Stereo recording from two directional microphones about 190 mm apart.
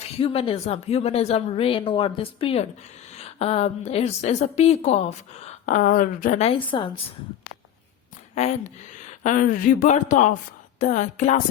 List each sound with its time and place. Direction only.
0.2 s a woman's voice: 30° left (ahead or behind)
8.4 s a woman's voice: 40° left (ahead or behind)